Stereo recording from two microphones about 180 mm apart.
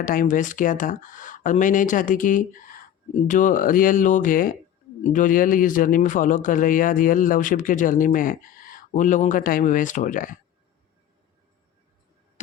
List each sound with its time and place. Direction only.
0.0 s a man's voice: 50° left (ahead or behind)